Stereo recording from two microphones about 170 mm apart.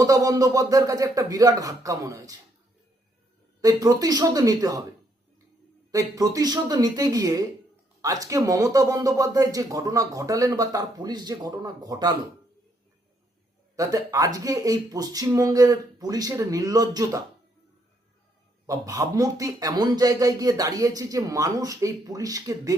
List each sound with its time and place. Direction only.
0.0 s speech: 20° right (ahead or behind)
3.6 s speech: 20° right (ahead or behind)
5.9 s speech: 20° right (ahead or behind)
13.7 s speech: 20° right (ahead or behind)
18.6 s speech: 20° right (ahead or behind)